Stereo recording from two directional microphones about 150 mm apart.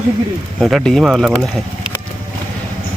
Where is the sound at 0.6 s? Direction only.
Centre (ahead or behind).